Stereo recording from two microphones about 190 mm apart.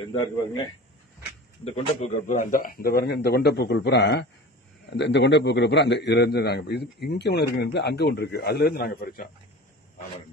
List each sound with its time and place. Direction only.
1.6 s a man's voice: 35° left (ahead or behind); by 9.3 s 50° left (ahead or behind)